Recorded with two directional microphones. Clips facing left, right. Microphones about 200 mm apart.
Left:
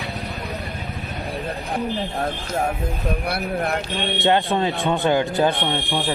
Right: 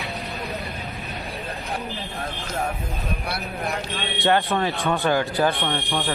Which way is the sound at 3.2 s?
60° left (ahead or behind).